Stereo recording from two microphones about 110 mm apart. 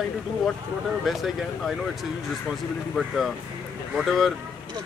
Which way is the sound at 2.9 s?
Centre (ahead or behind).